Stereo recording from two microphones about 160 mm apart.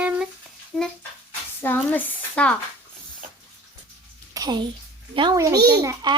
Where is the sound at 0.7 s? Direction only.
Centre (ahead or behind).